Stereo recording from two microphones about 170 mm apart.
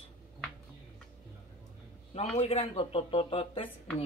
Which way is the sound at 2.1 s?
35° left (ahead or behind).